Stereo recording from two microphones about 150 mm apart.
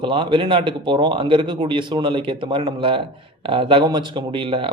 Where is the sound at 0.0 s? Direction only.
35° right (ahead or behind).